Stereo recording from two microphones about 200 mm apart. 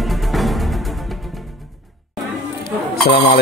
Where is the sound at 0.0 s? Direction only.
Centre (ahead or behind).